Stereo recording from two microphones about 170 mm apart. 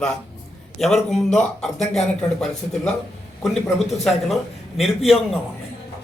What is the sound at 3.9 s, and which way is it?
Speech, centre (ahead or behind).